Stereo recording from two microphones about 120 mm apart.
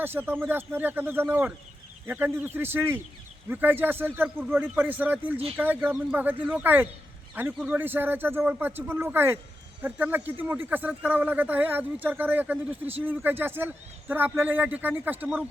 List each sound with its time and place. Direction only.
0.0 s a man's voice: 20° right (ahead or behind)